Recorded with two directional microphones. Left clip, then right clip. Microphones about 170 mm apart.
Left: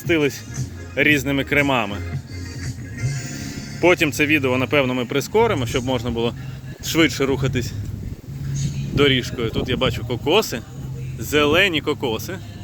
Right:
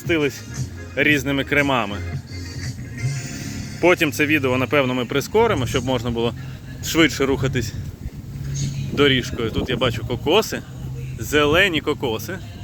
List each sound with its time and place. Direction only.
0.1 s speech: 20° left (ahead or behind)
0.9 s speech: 5° left (ahead or behind)
2.6 s music: 55° left (ahead or behind)
3.8 s speech: 5° left (ahead or behind)
9.0 s speech: centre (ahead or behind)